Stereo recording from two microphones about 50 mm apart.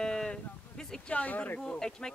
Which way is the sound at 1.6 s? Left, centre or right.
Centre.